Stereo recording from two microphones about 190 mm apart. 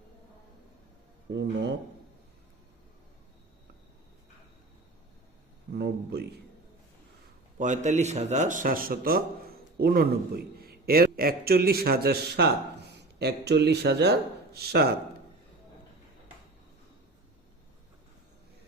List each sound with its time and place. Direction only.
1.3 s a sound: 65° right (ahead or behind)
5.7 s a man's voice: 60° right (ahead or behind)
7.6 s a man's voice: 40° right (ahead or behind); by 14.8 s 55° right (ahead or behind)